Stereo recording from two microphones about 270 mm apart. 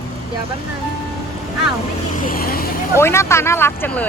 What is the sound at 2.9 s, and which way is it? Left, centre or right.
Speech, centre.